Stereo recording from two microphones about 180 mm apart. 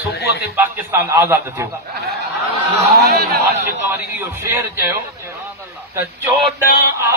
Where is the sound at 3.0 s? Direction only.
60° right (ahead or behind).